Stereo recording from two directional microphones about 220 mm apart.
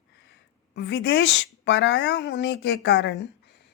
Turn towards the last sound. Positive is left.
turn(degrees=50)  # may be behind; listen again after turning